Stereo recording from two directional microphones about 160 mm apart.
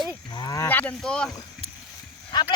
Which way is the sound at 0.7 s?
10° left (ahead or behind).